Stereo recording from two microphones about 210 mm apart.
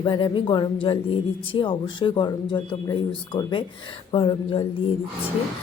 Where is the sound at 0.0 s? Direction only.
25° left (ahead or behind).